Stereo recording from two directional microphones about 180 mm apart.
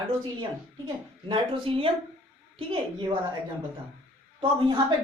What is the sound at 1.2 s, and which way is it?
Speech, 30° right (ahead or behind).